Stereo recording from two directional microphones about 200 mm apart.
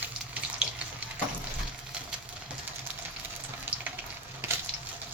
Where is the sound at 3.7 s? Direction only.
10° right (ahead or behind).